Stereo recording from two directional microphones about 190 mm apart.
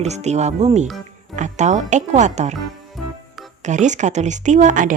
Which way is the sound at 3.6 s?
40° right (ahead or behind).